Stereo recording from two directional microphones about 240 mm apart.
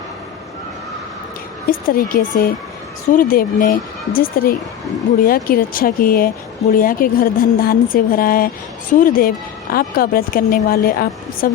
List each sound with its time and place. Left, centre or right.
1.7 s a woman's voice: left